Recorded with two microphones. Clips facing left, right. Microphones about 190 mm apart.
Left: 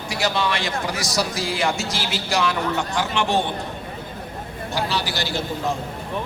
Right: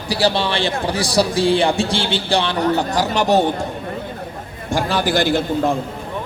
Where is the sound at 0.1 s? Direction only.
30° right (ahead or behind).